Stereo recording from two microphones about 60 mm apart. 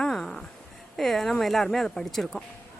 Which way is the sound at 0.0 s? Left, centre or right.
Centre.